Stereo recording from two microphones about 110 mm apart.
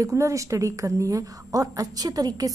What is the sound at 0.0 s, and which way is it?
A woman's voice, 30° right (ahead or behind).